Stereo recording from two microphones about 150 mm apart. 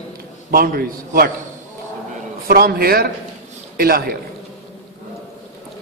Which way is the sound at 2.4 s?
85° right.